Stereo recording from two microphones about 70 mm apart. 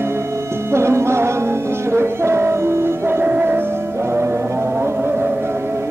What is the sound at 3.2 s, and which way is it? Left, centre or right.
Music, right.